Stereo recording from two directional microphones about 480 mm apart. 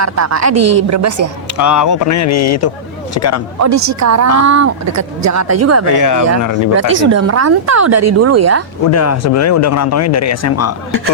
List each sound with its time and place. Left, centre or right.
0.0 s a woman's voice: right
1.5 s a man's voice: left
3.6 s a woman's voice: right
5.9 s a man's voice: left
6.9 s a woman's voice: right
8.9 s a man's voice: left